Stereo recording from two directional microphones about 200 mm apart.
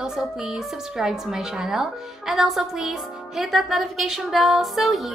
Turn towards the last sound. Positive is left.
turn(degrees=0)  # may be behind; listen again after turning